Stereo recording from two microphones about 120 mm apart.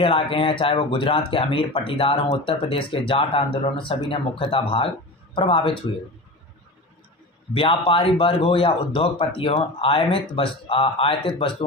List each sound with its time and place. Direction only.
0.0 s speech: 50° left (ahead or behind)
7.5 s speech: 45° left (ahead or behind)